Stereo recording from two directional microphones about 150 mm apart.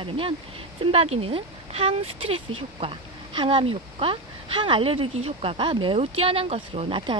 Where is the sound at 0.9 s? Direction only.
40° right (ahead or behind).